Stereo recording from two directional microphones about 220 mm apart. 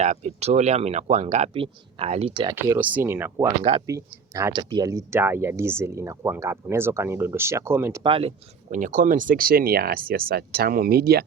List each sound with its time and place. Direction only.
0.0 s speech: 30° right (ahead or behind)
2.6 s speech: 10° right (ahead or behind)
3.6 s speech: 25° right (ahead or behind)
3.8 s speech: 15° right (ahead or behind)
8.0 s speech: 25° right (ahead or behind)
8.7 s speech: 35° right (ahead or behind)